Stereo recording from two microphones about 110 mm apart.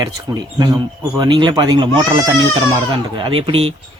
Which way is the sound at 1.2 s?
45° right (ahead or behind).